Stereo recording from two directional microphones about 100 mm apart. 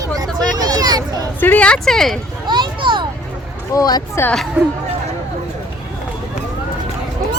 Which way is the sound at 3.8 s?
40° left (ahead or behind).